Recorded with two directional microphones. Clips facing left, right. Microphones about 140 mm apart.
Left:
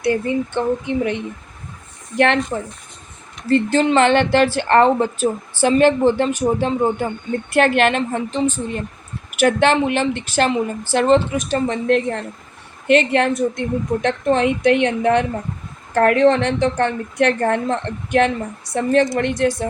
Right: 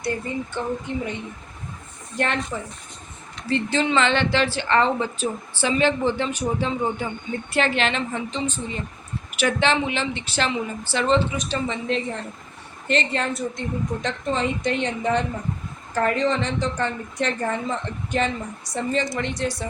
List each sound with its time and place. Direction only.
0.0 s speech: 65° left (ahead or behind)
3.5 s a woman's voice: 50° left (ahead or behind)